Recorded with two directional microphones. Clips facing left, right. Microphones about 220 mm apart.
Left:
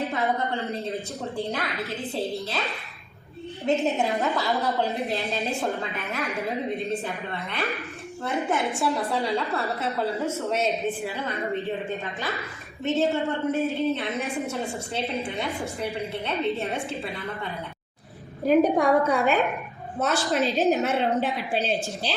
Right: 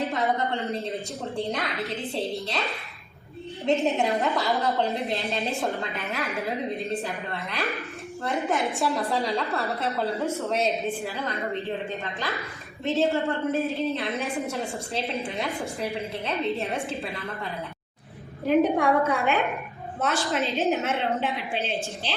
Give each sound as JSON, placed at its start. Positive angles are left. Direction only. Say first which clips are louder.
{"t": 0.1, "sound": "a woman's voice", "louder": "even", "side_deg": 0}
{"t": 12.8, "sound": "a woman's voice", "louder": "even", "side_deg": 0}
{"t": 18.4, "sound": "a woman's voice", "louder": "left 2 dB", "side_deg": 40}